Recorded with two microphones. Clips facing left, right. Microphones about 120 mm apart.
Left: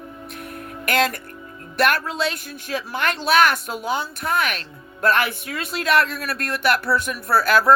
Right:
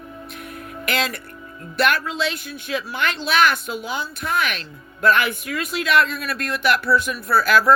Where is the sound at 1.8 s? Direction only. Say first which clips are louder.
Even; 45° left (ahead or behind).